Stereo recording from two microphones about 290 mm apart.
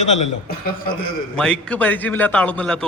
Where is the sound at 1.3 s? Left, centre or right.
Centre.